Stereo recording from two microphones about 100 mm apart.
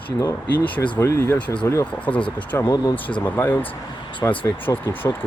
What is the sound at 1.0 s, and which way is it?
Speech, 30° left (ahead or behind).